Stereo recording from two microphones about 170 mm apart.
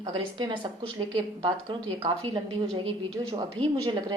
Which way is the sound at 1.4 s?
25° right (ahead or behind).